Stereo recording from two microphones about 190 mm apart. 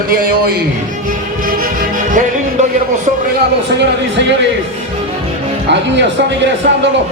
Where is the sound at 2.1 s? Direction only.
40° right (ahead or behind).